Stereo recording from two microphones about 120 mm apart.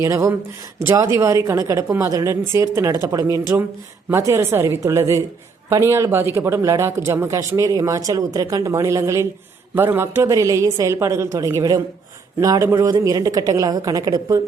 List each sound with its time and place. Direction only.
0.0 s speech: 25° right (ahead or behind)